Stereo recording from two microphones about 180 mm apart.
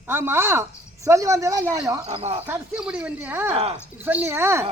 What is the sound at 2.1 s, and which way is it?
Speech, 35° right (ahead or behind).